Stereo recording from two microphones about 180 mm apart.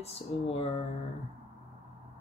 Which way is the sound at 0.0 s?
35° left (ahead or behind).